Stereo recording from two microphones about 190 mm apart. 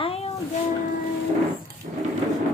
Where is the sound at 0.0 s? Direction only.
30° left (ahead or behind).